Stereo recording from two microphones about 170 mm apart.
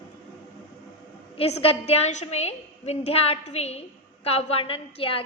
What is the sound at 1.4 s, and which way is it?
A woman's voice, 35° left (ahead or behind).